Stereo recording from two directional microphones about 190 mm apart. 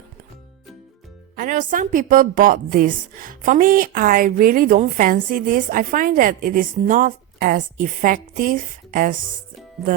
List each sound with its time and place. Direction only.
1.4 s a woman's voice: 45° right (ahead or behind)